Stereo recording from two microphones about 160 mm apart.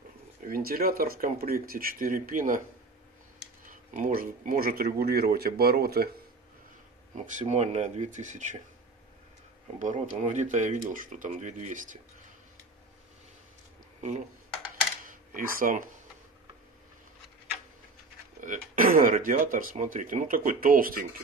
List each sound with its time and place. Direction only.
0.5 s speech: 65° right (ahead or behind)
3.6 s speech: 55° right (ahead or behind); by 6.0 s 75° right (ahead or behind)
7.2 s speech: 50° right (ahead or behind)
9.8 s speech: 50° right (ahead or behind)
15.3 s speech: 55° right (ahead or behind)
18.4 s speech: 55° right (ahead or behind)